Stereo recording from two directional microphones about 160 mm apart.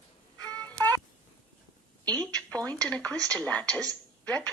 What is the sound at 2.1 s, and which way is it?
A woman's voice, 10° left (ahead or behind).